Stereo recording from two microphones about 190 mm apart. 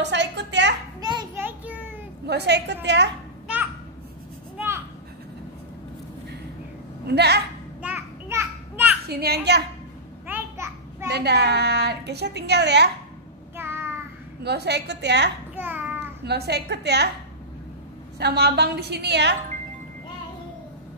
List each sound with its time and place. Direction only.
0.0 s a sound: 65° right (ahead or behind)
1.0 s children playing: 25° right (ahead or behind)
1.4 s a sound: 10° right (ahead or behind)
2.2 s a woman's voice: 60° right (ahead or behind)
7.1 s a woman's voice: 60° right (ahead or behind)
7.8 s children playing: 10° right (ahead or behind)
9.1 s a woman's voice: 55° right (ahead or behind)
10.2 s a sound: 10° right (ahead or behind)
11.1 s a woman's voice: 60° right (ahead or behind)
13.6 s child singing: 10° right (ahead or behind)
14.4 s a woman's voice: 60° right (ahead or behind)
15.5 s babbling: 10° right (ahead or behind)
16.3 s a woman's voice: 60° right (ahead or behind)
18.2 s a woman's voice: 60° right (ahead or behind)